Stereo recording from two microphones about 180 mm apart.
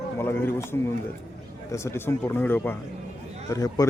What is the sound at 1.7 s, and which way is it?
A man's voice, 15° left (ahead or behind).